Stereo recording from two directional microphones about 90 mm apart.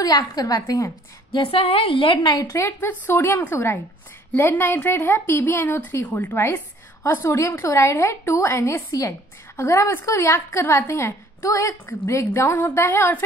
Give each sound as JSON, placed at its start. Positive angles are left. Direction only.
{"t": 0.0, "sound": "a woman's voice", "side_deg": 45}
{"t": 1.3, "sound": "a woman's voice", "side_deg": 80}
{"t": 2.3, "sound": "a woman's voice", "side_deg": 35}